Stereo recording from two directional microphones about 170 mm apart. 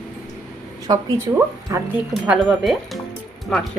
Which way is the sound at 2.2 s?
5° right (ahead or behind).